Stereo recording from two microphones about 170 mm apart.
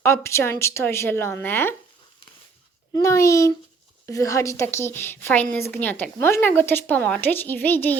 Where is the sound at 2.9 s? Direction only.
20° left (ahead or behind).